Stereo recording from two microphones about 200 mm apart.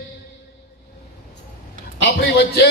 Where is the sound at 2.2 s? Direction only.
55° left (ahead or behind).